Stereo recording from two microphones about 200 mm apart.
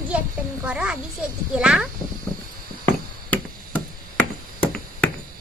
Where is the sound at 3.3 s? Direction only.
10° left (ahead or behind).